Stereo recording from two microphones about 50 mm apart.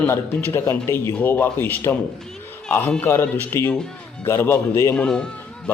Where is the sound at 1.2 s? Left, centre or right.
Left.